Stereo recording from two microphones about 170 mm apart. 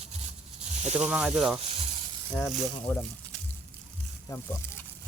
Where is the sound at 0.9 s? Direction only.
5° right (ahead or behind).